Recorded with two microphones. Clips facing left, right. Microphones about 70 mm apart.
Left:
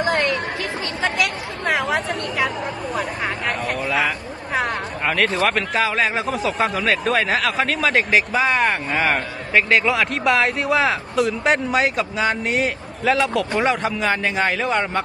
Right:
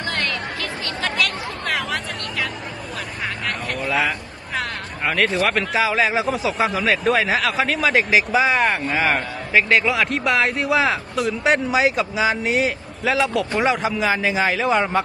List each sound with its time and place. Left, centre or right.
0.0 s chatter: left
3.8 s a man's voice: centre